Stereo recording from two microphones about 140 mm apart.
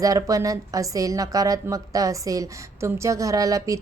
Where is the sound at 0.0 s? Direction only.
25° right (ahead or behind).